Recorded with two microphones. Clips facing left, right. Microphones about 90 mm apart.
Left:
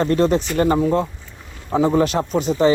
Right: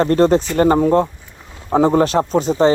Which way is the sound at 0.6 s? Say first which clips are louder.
Right 4 dB; 45° right (ahead or behind).